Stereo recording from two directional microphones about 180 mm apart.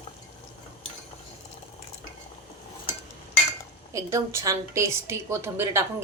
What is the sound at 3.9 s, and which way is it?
A woman's voice, 15° right (ahead or behind).